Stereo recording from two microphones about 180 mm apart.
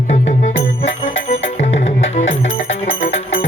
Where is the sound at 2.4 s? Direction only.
90° left.